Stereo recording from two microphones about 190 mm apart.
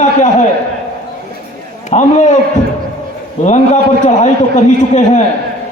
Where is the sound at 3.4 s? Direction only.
40° left (ahead or behind).